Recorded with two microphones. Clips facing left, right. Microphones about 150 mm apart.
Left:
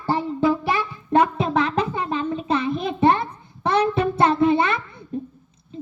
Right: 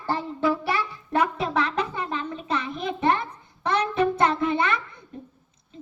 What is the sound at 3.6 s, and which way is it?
Music, 30° left (ahead or behind).